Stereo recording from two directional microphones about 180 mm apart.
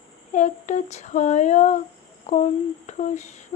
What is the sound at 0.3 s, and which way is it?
Female singing, 40° left (ahead or behind).